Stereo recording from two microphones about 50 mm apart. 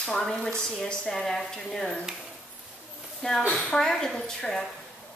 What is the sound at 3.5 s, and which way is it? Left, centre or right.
A woman's voice, centre.